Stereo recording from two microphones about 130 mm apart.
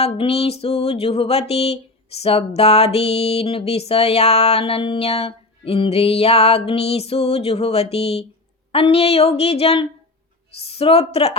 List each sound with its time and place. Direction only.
0.0 s music: 50° left (ahead or behind)